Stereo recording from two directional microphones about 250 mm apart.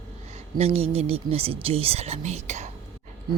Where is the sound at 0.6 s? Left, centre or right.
Right.